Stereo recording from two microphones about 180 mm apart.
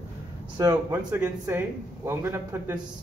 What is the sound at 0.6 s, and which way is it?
Speech, 15° right (ahead or behind).